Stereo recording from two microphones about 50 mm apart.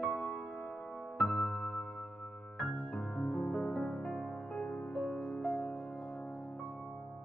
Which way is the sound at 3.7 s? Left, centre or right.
Left.